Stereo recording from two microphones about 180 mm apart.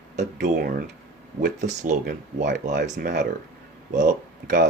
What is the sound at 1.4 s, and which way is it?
Speech, 40° right (ahead or behind).